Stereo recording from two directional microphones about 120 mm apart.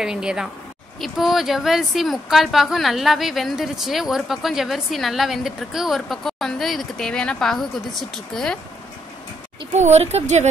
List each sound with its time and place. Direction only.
0.0 s speech: 5° right (ahead or behind)
9.7 s speech: 70° right (ahead or behind)